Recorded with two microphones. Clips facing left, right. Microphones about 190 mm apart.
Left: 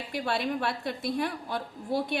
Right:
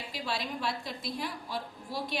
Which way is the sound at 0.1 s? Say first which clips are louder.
Left 7 dB; 60° left (ahead or behind).